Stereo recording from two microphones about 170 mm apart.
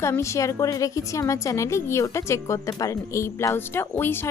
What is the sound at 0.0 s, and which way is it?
A woman's voice, 15° left (ahead or behind).